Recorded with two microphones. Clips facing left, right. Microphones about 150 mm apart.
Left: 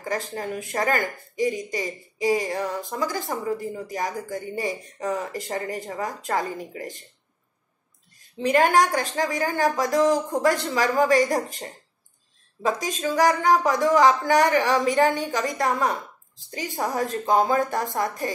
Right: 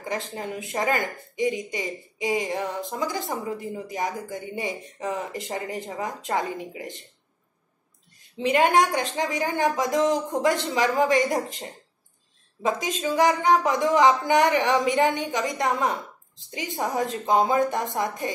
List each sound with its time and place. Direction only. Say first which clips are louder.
0.0 s speech: left 2 dB; 20° right (ahead or behind)
8.5 s speech: left 1 dB; 20° right (ahead or behind)
13.0 s speech: left 1 dB; 20° right (ahead or behind)